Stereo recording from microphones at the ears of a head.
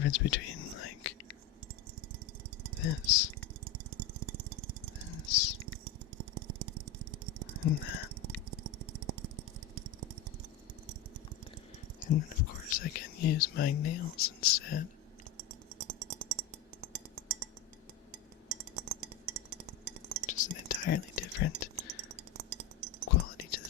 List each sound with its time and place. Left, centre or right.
0.0 s whispering: left
2.8 s speech: left
3.4 s lawn mower: right
5.0 s a sound: left
5.6 s a sound: right
7.6 s speech: left
8.1 s a sound: right
12.0 s speech: left
15.4 s a sound: right
18.4 s music: right
20.3 s whispering: left
21.8 s chink: right
23.0 s whispering: left